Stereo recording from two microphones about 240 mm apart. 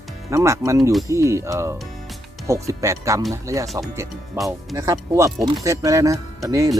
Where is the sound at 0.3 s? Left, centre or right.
Centre.